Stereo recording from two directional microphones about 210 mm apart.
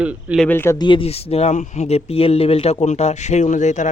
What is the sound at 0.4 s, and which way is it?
Speech, 10° left (ahead or behind).